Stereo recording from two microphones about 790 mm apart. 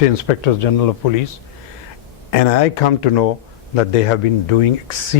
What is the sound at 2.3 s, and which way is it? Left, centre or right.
Speech, left.